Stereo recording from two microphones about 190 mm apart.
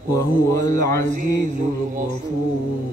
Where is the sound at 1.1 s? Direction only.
40° right (ahead or behind).